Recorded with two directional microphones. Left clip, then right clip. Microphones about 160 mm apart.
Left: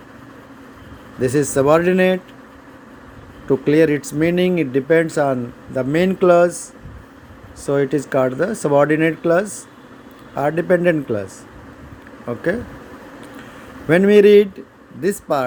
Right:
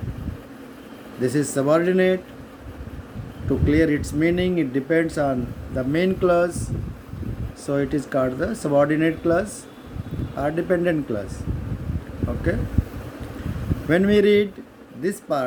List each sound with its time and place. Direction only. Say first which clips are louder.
1.2 s speech: left 6 dB; 45° left (ahead or behind)
3.7 s a man's voice: left 5 dB; 45° left (ahead or behind)
13.8 s speech: left 7 dB; 40° left (ahead or behind)